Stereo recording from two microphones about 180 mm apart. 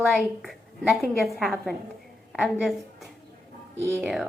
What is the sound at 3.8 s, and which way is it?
Speech, 5° right (ahead or behind).